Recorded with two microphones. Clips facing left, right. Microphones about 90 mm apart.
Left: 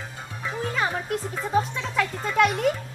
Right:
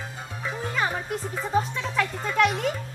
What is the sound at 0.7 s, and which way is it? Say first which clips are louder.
Speech: left 1 dB; centre (ahead or behind).